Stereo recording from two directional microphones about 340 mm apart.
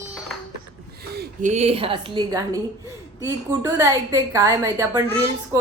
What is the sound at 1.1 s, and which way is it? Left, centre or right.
A woman's voice, right.